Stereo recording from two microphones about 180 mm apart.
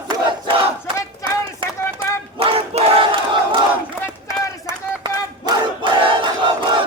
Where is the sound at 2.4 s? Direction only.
30° right (ahead or behind).